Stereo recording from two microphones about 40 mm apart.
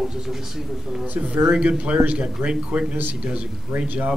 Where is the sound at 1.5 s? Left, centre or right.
Right.